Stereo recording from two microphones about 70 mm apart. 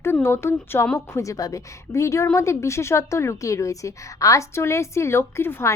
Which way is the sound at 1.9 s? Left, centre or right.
Left.